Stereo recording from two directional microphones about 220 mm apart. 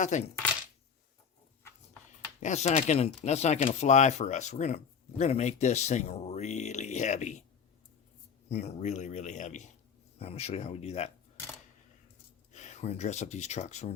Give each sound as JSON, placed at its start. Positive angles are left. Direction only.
{"t": 0.0, "sound": "speech", "side_deg": 35}
{"t": 2.4, "sound": "speech", "side_deg": 30}
{"t": 8.4, "sound": "speech", "side_deg": 30}
{"t": 12.5, "sound": "speech", "side_deg": 30}